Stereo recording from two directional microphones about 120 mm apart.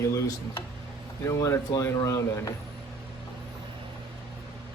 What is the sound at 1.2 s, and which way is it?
A man's voice, 25° left (ahead or behind).